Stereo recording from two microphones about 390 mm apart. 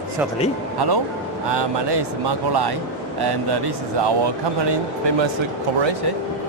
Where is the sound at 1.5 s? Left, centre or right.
Right.